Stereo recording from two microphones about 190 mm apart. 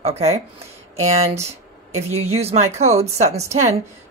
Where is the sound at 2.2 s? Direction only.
35° right (ahead or behind).